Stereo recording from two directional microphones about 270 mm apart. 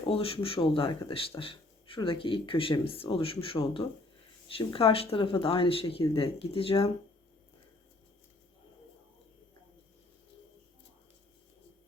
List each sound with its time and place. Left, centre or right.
0.0 s speech: left